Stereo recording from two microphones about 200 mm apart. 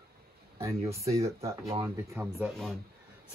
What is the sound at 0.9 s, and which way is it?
Speech, 15° right (ahead or behind).